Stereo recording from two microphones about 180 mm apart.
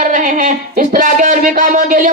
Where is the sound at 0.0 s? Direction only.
45° right (ahead or behind).